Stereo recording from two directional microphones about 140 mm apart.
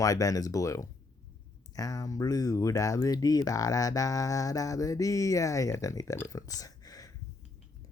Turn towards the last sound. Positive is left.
turn(degrees=25)  # may be behind; listen again after turning